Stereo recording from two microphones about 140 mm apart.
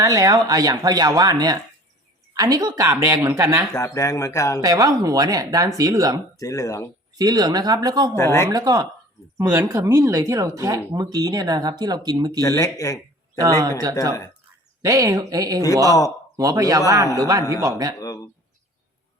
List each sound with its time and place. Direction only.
0.0 s speech: 25° right (ahead or behind)
2.8 s speech: 15° right (ahead or behind)
3.7 s speech: 20° left (ahead or behind)
4.6 s speech: 25° right (ahead or behind)
6.4 s speech: 25° left (ahead or behind)
7.2 s speech: 30° right (ahead or behind)
8.1 s speech: 20° left (ahead or behind)
8.4 s speech: 25° right (ahead or behind)
12.4 s a man's voice: 25° left (ahead or behind)
13.4 s speech: 25° right (ahead or behind)
18.0 s speech: 25° left (ahead or behind)